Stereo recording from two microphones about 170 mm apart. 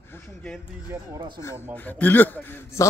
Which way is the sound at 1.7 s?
10° left (ahead or behind).